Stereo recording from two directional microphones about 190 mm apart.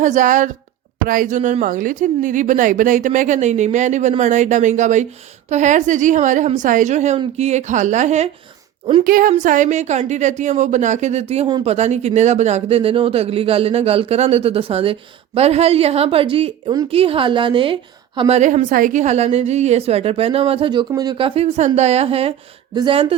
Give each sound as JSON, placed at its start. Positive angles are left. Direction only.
{"t": 0.0, "sound": "a woman's voice", "side_deg": -40}